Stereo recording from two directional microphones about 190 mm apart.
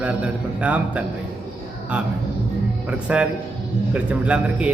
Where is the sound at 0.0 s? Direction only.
10° right (ahead or behind).